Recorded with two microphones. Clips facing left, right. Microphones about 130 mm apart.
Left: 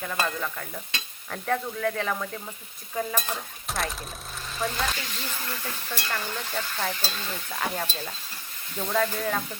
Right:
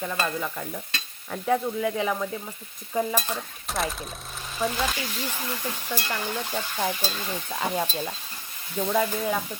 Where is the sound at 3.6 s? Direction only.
Centre (ahead or behind).